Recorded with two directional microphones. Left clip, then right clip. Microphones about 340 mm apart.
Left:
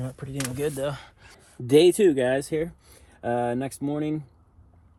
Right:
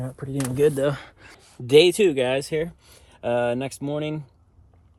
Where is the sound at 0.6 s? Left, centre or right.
Right.